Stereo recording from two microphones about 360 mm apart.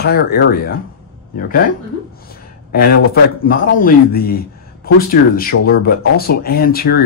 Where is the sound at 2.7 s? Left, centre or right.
Left.